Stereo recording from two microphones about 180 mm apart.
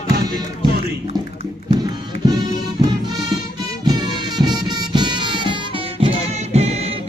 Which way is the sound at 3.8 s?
20° right (ahead or behind).